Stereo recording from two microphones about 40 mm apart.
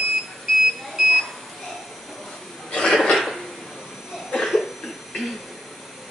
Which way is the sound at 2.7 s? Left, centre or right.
Centre.